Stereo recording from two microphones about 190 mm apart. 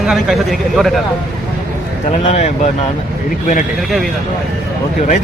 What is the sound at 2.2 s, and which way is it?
Speech, 35° left (ahead or behind).